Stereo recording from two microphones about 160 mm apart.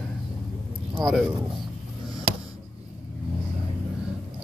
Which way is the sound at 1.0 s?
5° right (ahead or behind).